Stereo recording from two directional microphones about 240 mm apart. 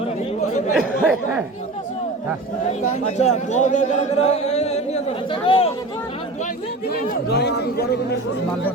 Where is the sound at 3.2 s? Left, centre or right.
Left.